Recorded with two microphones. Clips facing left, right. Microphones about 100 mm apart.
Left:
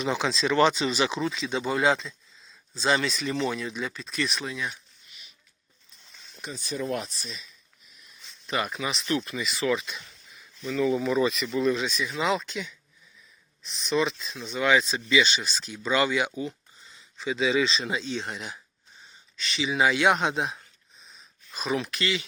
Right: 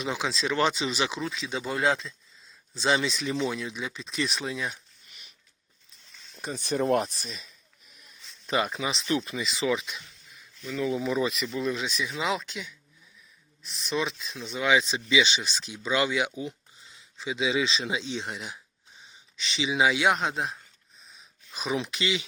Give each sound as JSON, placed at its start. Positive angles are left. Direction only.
{"t": 0.0, "sound": "speech", "side_deg": -5}
{"t": 2.8, "sound": "speech", "side_deg": -10}
{"t": 4.4, "sound": "speech", "side_deg": -30}
{"t": 6.5, "sound": "speech", "side_deg": -50}
{"t": 8.4, "sound": "speech", "side_deg": -25}
{"t": 19.4, "sound": "speech", "side_deg": -20}
{"t": 21.5, "sound": "speech", "side_deg": -15}